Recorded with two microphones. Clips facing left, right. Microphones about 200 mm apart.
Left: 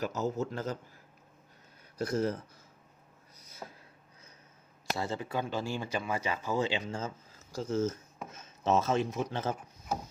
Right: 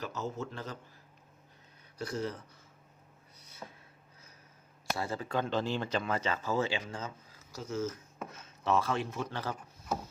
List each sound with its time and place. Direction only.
0.0 s a man's voice: 45° left (ahead or behind)
2.0 s a man's voice: 45° left (ahead or behind)
4.9 s a man's voice: 25° left (ahead or behind)
5.3 s a man's voice: 10° left (ahead or behind)